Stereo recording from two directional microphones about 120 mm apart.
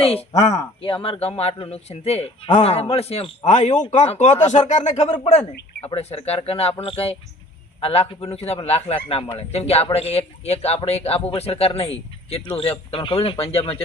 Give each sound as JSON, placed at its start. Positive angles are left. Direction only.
{"t": 0.0, "sound": "a man's voice", "side_deg": 55}
{"t": 0.8, "sound": "a man's voice", "side_deg": 45}
{"t": 5.8, "sound": "a man's voice", "side_deg": 60}